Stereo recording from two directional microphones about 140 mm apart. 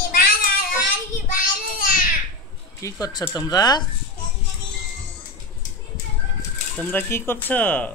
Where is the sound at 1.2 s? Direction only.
80° left.